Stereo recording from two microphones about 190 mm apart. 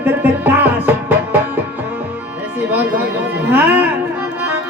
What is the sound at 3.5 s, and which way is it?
Music, 10° right (ahead or behind).